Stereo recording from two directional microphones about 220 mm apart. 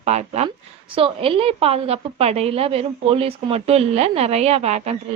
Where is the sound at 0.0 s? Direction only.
30° right (ahead or behind).